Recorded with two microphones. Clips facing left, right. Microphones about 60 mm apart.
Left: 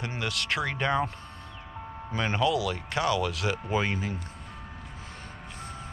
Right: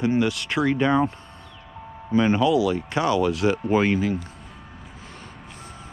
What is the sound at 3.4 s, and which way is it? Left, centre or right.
Speech, right.